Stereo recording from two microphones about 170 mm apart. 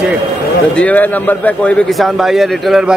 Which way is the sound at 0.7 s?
10° left (ahead or behind).